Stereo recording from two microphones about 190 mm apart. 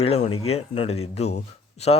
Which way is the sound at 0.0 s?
30° left (ahead or behind).